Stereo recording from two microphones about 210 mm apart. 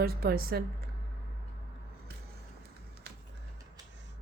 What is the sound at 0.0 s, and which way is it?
Speech, 45° right (ahead or behind).